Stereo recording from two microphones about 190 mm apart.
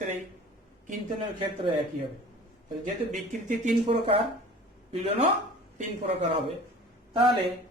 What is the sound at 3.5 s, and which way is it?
Speech, 35° right (ahead or behind).